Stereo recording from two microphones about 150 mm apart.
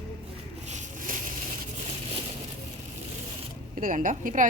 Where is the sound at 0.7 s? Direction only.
60° right (ahead or behind).